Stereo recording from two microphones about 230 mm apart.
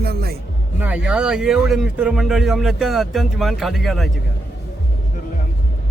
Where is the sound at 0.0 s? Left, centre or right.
Right.